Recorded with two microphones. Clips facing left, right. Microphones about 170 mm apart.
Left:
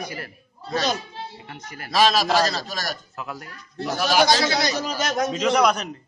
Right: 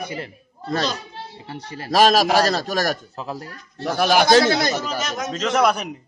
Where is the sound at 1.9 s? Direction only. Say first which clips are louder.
Right 4 dB; 50° right (ahead or behind).